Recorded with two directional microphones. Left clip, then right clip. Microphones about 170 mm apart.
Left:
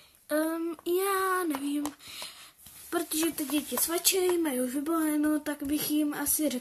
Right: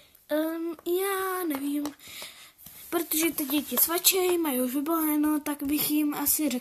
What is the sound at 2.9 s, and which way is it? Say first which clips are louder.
Speech: right 2 dB; 30° right (ahead or behind).